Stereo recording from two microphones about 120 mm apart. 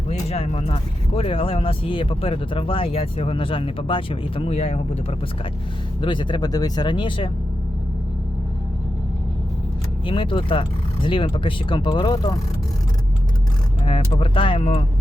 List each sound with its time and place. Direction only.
0.1 s speech: 60° left (ahead or behind)
6.0 s speech: 40° left (ahead or behind)
10.1 s speech: 45° left (ahead or behind)
13.8 s speech: 50° left (ahead or behind)